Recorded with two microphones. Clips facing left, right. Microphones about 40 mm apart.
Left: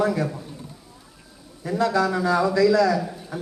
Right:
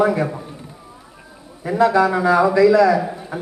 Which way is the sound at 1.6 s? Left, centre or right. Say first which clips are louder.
Right 6 dB; right.